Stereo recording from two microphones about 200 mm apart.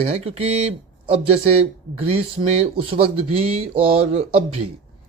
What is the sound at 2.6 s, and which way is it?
Speech, 25° right (ahead or behind).